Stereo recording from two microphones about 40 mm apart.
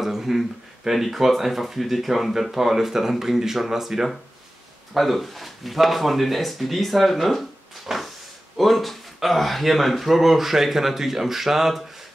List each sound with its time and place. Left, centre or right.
0.0 s speech: centre